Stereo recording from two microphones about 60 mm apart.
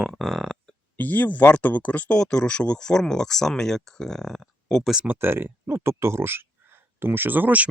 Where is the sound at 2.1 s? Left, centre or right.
Centre.